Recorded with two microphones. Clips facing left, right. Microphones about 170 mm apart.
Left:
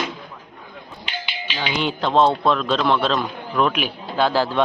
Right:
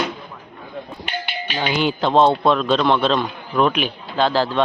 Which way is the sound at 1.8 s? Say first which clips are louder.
Right 2 dB; centre (ahead or behind).